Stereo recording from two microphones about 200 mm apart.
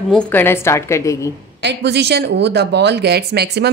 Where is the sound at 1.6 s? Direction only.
55° right (ahead or behind).